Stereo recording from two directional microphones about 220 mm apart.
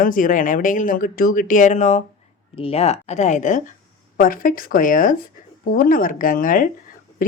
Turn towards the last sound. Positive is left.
turn(degrees=40)  # may be behind; listen again after turning